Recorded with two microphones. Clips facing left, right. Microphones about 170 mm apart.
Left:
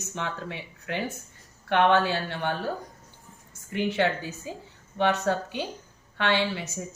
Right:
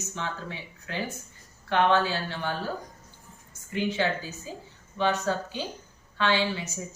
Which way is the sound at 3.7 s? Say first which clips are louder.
Left 2 dB; 65° left (ahead or behind).